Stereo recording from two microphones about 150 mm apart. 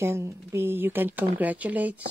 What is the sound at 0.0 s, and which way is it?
Speech, 20° right (ahead or behind).